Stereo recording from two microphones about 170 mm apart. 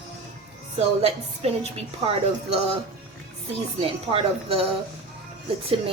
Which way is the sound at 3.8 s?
35° right (ahead or behind).